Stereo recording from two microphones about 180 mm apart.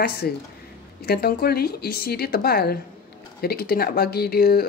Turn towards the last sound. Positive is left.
turn(degrees=60)  # may be behind; listen again after turning